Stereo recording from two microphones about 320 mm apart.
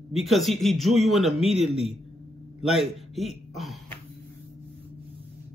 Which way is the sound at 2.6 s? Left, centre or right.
Centre.